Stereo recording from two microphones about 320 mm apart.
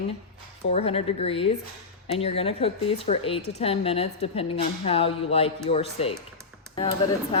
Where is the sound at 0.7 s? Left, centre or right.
Centre.